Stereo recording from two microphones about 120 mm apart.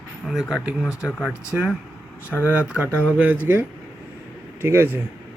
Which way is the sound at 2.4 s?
10° right (ahead or behind).